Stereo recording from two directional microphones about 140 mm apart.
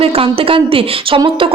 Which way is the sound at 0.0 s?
40° right (ahead or behind).